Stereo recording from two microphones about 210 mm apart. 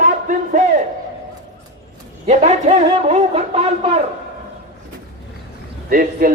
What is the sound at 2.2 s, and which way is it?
A man's voice, 35° right (ahead or behind).